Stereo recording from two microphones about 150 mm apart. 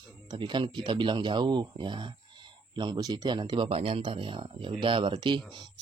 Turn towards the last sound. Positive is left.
turn(degrees=-35)  # may be behind; listen again after turning